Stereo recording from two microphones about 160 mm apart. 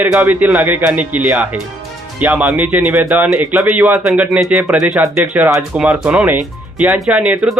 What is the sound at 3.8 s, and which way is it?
Speech, 5° right (ahead or behind).